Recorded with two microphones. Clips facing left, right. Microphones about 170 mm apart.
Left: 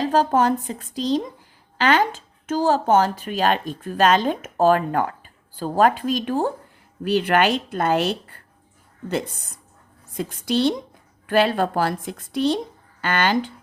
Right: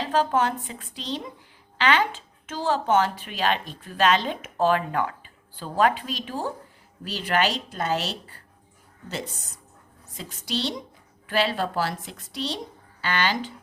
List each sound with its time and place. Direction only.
0.0 s a woman's voice: 40° left (ahead or behind)